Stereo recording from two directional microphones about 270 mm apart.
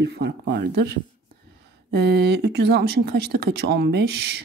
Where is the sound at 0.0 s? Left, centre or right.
Right.